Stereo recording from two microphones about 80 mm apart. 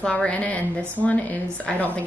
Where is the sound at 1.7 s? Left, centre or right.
Centre.